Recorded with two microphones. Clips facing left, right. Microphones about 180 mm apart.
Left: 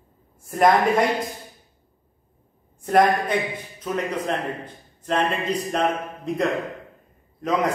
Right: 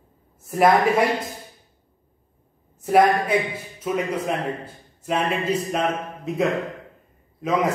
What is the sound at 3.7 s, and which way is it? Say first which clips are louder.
A man's voice: right 2 dB; 5° right (ahead or behind).